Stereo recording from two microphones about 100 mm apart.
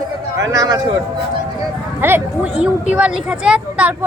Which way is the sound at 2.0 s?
20° right (ahead or behind).